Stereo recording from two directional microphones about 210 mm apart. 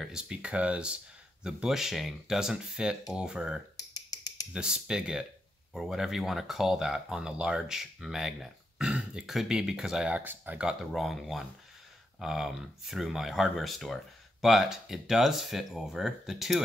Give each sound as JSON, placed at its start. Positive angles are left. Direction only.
{"t": 0.0, "sound": "speech", "side_deg": -5}
{"t": 3.9, "sound": "a sound", "side_deg": 20}
{"t": 4.6, "sound": "speech", "side_deg": -5}